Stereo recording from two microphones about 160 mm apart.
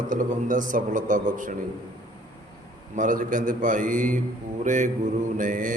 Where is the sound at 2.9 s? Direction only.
55° right (ahead or behind).